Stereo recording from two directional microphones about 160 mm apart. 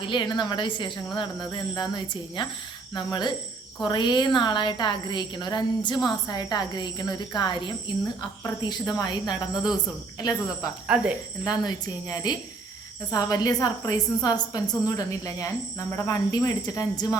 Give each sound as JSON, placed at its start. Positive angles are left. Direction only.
{"t": 0.0, "sound": "a woman's voice", "side_deg": 30}
{"t": 10.8, "sound": "speech", "side_deg": -5}
{"t": 11.4, "sound": "a woman's voice", "side_deg": 25}